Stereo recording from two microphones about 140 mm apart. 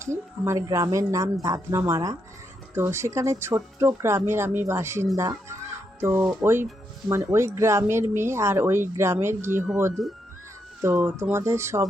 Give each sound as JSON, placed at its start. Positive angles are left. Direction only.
{"t": 0.0, "sound": "speech", "side_deg": -20}
{"t": 9.9, "sound": "speech", "side_deg": 0}
{"t": 10.8, "sound": "speech", "side_deg": -20}